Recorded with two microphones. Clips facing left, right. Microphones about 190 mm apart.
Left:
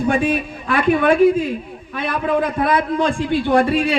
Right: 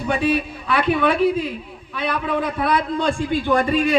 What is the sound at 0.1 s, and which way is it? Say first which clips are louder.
A man's voice: right 3 dB; 50° left (ahead or behind).